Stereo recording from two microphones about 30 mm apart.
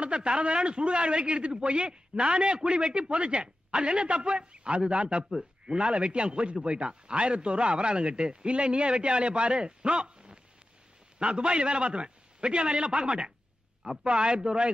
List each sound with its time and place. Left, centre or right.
0.0 s speech: right
5.3 s a man's voice: centre
5.8 s speech: right